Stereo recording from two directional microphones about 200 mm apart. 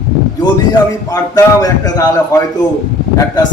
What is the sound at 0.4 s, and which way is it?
A man's voice, 20° left (ahead or behind).